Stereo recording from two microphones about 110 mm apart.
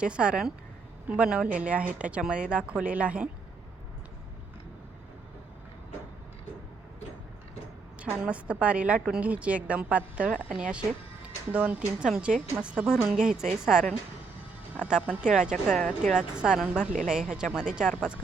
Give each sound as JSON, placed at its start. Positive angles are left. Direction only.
{"t": 0.0, "sound": "a woman's voice", "side_deg": -10}
{"t": 8.0, "sound": "a woman's voice", "side_deg": -10}
{"t": 14.8, "sound": "a woman's voice", "side_deg": -10}
{"t": 15.6, "sound": "speech", "side_deg": 10}
{"t": 15.9, "sound": "a woman's voice", "side_deg": -5}